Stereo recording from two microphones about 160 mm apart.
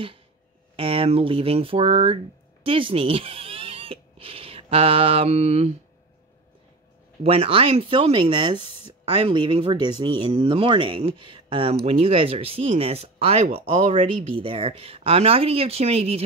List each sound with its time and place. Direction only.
0.7 s speech: 35° right (ahead or behind)
2.6 s a sound: 35° right (ahead or behind)
7.2 s speech: 35° right (ahead or behind)